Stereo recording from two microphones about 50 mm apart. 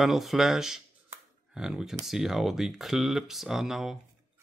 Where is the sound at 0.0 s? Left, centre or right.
Centre.